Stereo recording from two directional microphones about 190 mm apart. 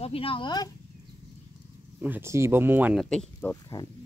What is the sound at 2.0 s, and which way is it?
Speech, 10° right (ahead or behind).